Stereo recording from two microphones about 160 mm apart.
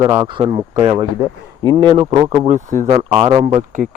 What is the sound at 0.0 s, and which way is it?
Speech, 20° right (ahead or behind).